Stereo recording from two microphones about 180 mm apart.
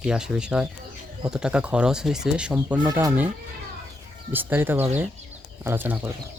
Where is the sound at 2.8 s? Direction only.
20° right (ahead or behind).